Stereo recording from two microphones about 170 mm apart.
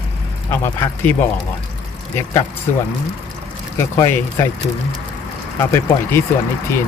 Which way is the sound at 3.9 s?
15° left (ahead or behind).